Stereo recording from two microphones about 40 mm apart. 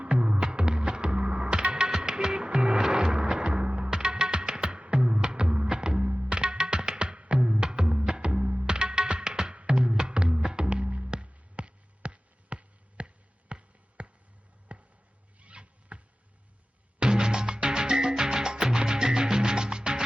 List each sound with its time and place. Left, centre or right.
0.0 s music: right
14.7 s basketball bounce: right
15.4 s a sound: right
17.0 s music: right